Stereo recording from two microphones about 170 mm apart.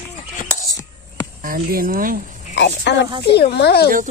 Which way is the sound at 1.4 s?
60° right (ahead or behind).